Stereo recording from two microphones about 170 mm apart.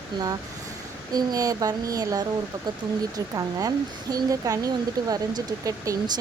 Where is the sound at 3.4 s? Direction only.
20° right (ahead or behind).